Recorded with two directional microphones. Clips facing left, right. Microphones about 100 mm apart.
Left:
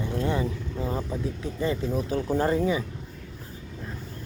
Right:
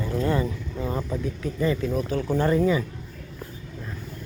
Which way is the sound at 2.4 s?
30° left (ahead or behind).